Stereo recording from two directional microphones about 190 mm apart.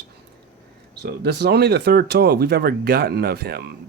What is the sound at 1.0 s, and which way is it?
Speech, 60° right (ahead or behind).